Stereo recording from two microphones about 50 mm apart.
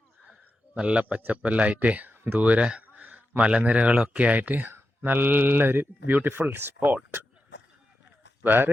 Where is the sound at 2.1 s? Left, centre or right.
Right.